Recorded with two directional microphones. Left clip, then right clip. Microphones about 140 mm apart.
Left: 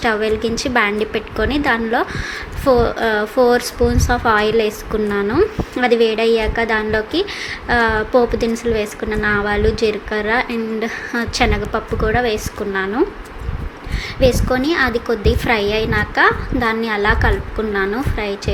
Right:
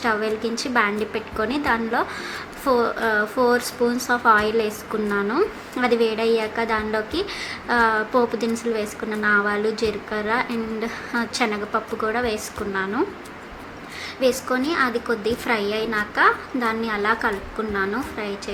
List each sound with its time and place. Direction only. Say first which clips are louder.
0.0 s a woman's voice: left 5 dB; 15° left (ahead or behind)
14.2 s a woman's voice: left 6 dB; 15° left (ahead or behind)